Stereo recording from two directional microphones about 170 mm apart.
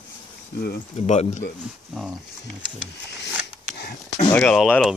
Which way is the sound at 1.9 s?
Centre (ahead or behind).